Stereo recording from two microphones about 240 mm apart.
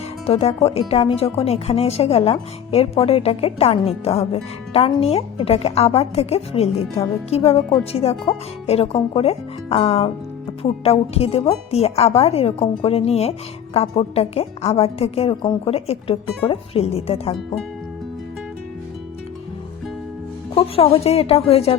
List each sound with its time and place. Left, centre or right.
0.3 s speech: left
20.6 s speech: left